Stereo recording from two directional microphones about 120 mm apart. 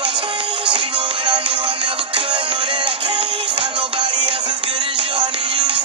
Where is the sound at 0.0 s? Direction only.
45° right (ahead or behind).